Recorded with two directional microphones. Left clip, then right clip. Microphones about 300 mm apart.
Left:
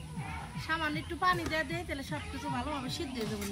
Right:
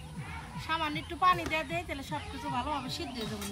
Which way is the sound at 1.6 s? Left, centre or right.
Centre.